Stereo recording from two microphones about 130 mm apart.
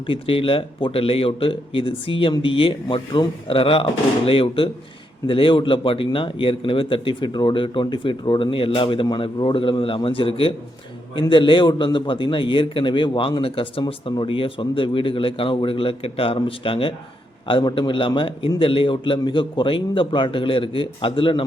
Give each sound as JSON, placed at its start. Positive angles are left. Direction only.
{"t": 0.1, "sound": "a man's voice", "side_deg": 45}